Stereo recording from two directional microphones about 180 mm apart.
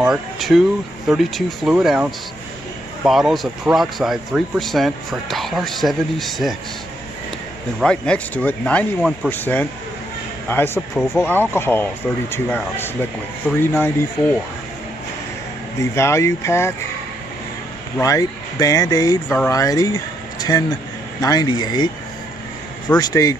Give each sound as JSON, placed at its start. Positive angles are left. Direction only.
{"t": 0.0, "sound": "speech", "side_deg": 0}
{"t": 7.8, "sound": "speech", "side_deg": 5}
{"t": 15.8, "sound": "speech", "side_deg": 15}
{"t": 17.9, "sound": "speech", "side_deg": 20}
{"t": 22.9, "sound": "speech", "side_deg": 20}